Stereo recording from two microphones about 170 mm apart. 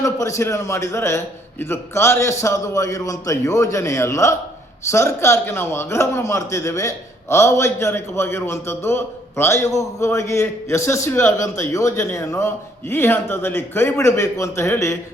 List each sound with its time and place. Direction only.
0.0 s a man's voice: 20° left (ahead or behind)